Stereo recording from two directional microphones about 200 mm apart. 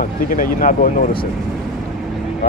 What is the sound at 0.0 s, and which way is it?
Speech, 45° left (ahead or behind).